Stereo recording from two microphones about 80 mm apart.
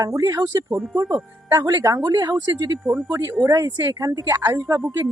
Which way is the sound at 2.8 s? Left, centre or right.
Right.